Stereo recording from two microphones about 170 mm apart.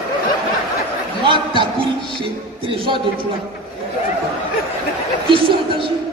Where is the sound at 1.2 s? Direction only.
30° right (ahead or behind).